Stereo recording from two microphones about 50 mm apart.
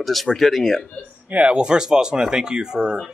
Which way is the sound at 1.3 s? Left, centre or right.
Right.